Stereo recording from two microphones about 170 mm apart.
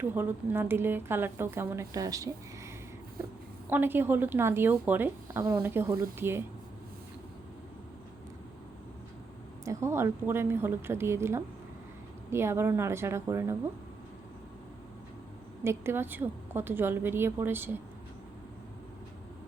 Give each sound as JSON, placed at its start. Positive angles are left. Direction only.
{"t": 0.0, "sound": "speech", "side_deg": -10}
{"t": 3.7, "sound": "speech", "side_deg": -10}
{"t": 9.6, "sound": "speech", "side_deg": -15}
{"t": 15.6, "sound": "speech", "side_deg": -15}